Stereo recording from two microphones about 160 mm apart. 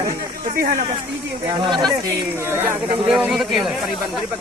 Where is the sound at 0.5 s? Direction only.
65° right (ahead or behind).